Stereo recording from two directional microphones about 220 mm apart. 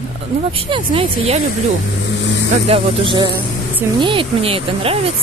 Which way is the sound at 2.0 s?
55° left (ahead or behind).